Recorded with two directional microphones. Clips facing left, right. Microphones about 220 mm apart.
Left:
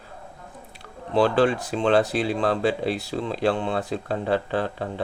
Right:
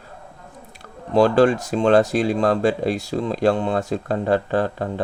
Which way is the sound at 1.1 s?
45° right (ahead or behind).